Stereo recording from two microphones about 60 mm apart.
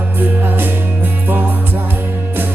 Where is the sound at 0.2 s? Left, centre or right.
Right.